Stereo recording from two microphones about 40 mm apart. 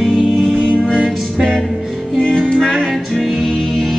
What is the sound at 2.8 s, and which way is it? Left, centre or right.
Music, centre.